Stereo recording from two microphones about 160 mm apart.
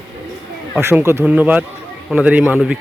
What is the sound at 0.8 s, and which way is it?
Speech, 15° right (ahead or behind).